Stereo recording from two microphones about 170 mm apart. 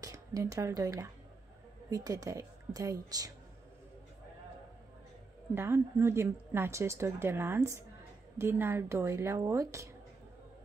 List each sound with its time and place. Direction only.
0.0 s a woman's voice: 20° right (ahead or behind)
5.5 s a woman's voice: 15° right (ahead or behind)